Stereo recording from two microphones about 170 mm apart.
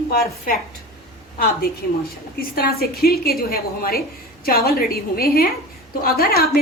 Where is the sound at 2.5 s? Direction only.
60° left (ahead or behind).